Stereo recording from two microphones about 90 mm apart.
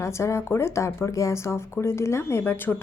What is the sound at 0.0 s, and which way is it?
Speech, 30° left (ahead or behind).